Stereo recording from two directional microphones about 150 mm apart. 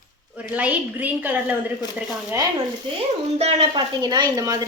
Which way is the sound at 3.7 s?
30° right (ahead or behind).